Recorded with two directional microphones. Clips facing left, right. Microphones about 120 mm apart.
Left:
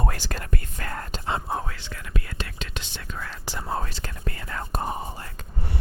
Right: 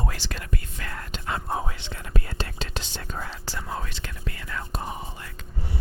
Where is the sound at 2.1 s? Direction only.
35° right (ahead or behind).